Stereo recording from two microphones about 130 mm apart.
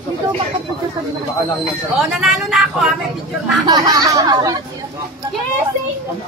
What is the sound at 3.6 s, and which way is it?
Speech, 30° right (ahead or behind).